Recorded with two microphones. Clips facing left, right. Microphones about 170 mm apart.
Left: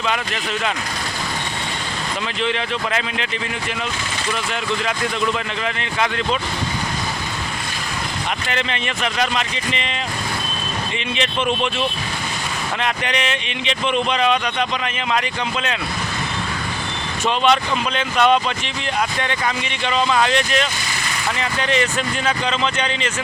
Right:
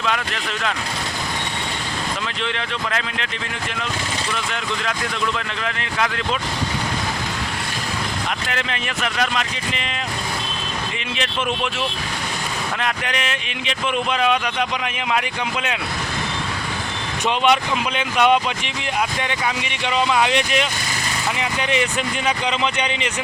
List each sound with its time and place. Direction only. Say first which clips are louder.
2.4 s speech: left 7 dB; 5° left (ahead or behind)
8.4 s speech: left 2 dB; centre (ahead or behind)
11.1 s speech: left 3 dB; centre (ahead or behind)
17.2 s speech: left 1 dB; 10° right (ahead or behind)